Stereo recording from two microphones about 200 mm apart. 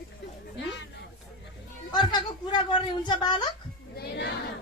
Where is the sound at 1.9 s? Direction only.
20° left (ahead or behind).